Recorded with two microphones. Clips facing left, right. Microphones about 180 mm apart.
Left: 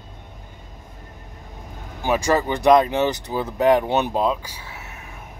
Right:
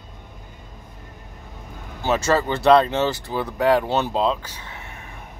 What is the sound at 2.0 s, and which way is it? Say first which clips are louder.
Speech: even; 15° left (ahead or behind).